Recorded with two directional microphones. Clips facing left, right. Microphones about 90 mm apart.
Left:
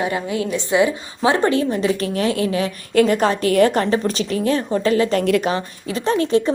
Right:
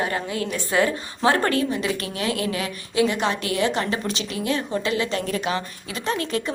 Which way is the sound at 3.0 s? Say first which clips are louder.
Left 6 dB; 45° left (ahead or behind).